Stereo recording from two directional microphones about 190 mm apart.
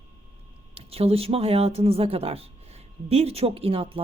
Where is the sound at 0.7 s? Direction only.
30° right (ahead or behind).